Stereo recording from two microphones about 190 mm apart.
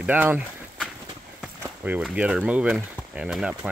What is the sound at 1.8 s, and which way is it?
Speech, 5° right (ahead or behind).